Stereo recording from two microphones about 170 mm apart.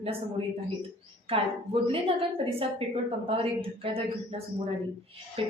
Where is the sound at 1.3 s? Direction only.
35° right (ahead or behind).